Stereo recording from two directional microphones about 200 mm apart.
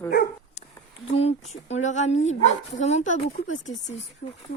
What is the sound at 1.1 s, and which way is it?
Speech, 30° left (ahead or behind).